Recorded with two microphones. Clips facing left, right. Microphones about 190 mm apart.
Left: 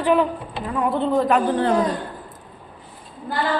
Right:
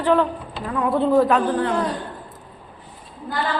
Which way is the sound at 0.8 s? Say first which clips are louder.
Right 3 dB; centre (ahead or behind).